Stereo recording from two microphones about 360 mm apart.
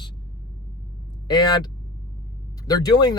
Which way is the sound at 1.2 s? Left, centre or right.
Centre.